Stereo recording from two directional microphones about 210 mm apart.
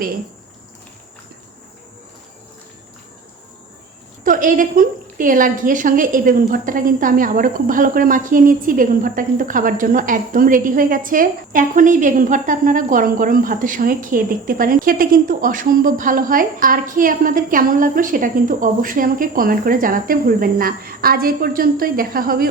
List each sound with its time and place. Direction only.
4.2 s a woman's voice: 40° right (ahead or behind)